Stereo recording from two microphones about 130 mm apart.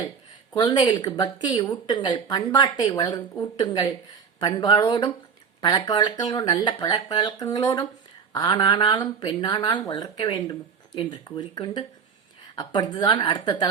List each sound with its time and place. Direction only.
0.5 s speech: 35° left (ahead or behind)